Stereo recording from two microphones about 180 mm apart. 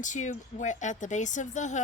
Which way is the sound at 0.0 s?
45° left (ahead or behind).